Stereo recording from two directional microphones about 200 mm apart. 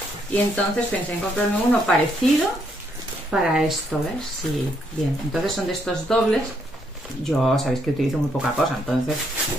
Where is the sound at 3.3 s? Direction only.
Centre (ahead or behind).